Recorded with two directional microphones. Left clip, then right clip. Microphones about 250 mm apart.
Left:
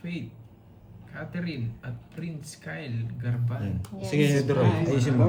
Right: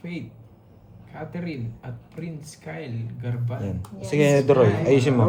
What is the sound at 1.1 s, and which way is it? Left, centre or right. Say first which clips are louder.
Speech: right 2 dB; centre.